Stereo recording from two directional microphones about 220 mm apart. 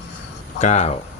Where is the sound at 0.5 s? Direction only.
30° left (ahead or behind).